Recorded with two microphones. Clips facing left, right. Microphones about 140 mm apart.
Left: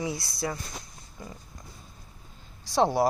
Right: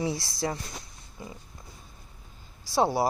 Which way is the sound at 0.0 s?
30° right (ahead or behind).